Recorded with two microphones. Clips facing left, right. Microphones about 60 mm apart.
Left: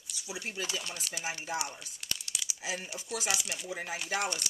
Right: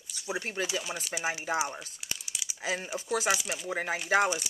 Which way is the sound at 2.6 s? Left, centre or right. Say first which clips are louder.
Right 5 dB; right.